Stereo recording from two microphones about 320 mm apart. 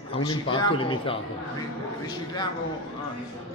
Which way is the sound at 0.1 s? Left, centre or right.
Centre.